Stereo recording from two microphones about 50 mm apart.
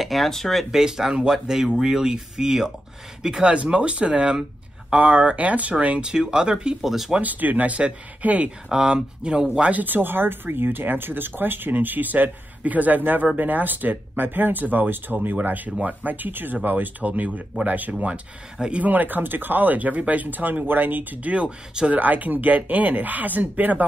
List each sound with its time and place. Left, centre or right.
0.0 s speech: centre
0.7 s speech: centre
6.8 s speech: centre
7.2 s speech: right
8.6 s speech: centre; by 17.9 s right
17.9 s speech: right
18.9 s speech: right
21.3 s speech: right
22.0 s speech: right